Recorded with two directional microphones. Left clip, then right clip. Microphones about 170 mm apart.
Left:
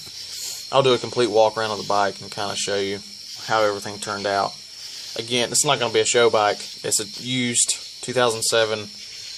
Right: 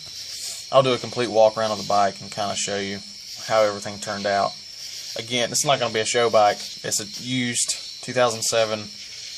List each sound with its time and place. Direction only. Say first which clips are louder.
0.7 s speech: even; 20° left (ahead or behind)